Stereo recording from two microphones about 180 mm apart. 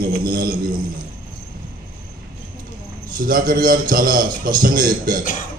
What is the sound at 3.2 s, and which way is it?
A man's voice, 50° right (ahead or behind).